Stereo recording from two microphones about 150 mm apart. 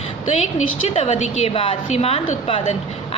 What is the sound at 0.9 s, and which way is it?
A woman's voice, 50° left (ahead or behind).